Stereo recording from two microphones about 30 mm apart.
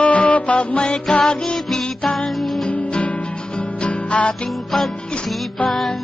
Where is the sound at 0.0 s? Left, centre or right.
Left.